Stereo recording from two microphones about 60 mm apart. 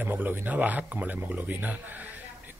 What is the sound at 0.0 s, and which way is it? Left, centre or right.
Speech, right.